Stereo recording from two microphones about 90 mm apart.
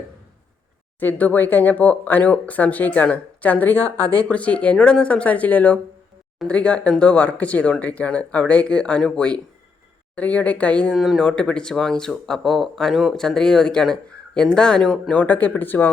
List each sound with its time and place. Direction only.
0.9 s speech: 20° left (ahead or behind)
10.9 s speech: centre (ahead or behind); by 15.9 s 20° left (ahead or behind)